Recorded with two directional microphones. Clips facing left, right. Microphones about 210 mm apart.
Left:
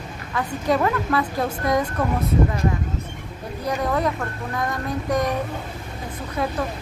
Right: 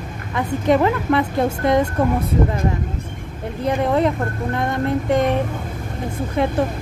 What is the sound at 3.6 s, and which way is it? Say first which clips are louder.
A woman's voice: right 5 dB; 25° right (ahead or behind).